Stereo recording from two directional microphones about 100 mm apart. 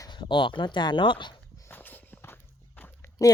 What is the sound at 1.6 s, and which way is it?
Walk, 20° left (ahead or behind).